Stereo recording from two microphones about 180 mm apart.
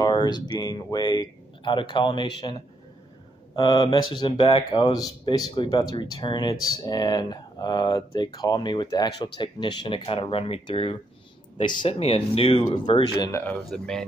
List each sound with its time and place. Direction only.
0.0 s speech: 25° left (ahead or behind)
3.5 s speech: 25° left (ahead or behind)
13.4 s speech: 5° left (ahead or behind)